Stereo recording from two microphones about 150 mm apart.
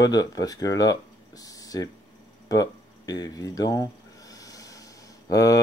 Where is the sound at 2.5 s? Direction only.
25° left (ahead or behind).